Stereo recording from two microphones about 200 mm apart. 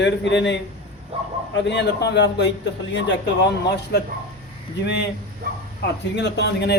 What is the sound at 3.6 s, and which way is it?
Speech, 55° left (ahead or behind).